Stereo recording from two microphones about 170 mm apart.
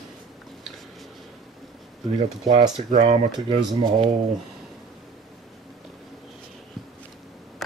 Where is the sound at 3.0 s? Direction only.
40° right (ahead or behind).